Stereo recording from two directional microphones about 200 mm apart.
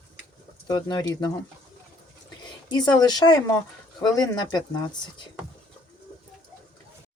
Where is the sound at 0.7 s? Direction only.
20° left (ahead or behind).